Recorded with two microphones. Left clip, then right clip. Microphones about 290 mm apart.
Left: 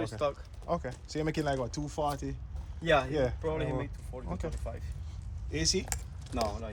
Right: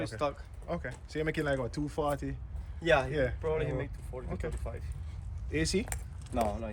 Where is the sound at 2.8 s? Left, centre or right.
Right.